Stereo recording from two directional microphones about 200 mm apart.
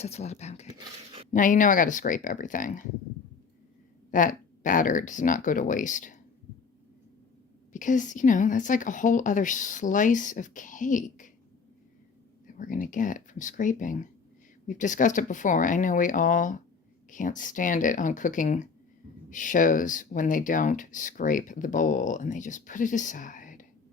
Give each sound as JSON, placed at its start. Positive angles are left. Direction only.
{"t": 0.0, "sound": "speech", "side_deg": 35}
{"t": 4.1, "sound": "speech", "side_deg": 40}
{"t": 7.7, "sound": "speech", "side_deg": 40}
{"t": 12.5, "sound": "speech", "side_deg": 40}